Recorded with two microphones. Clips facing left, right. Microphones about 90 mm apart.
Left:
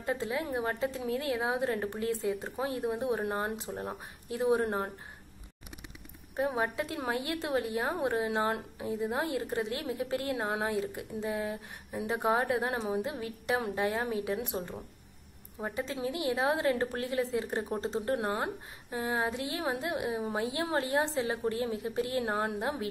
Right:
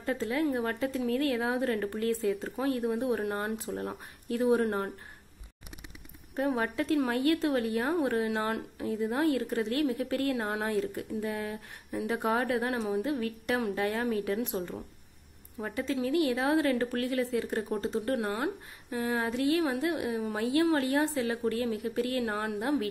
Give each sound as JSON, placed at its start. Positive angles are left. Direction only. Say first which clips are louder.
{"t": 0.0, "sound": "a woman's voice", "louder": "right 3 dB", "side_deg": 15}
{"t": 6.3, "sound": "a woman's voice", "louder": "right 1 dB", "side_deg": 15}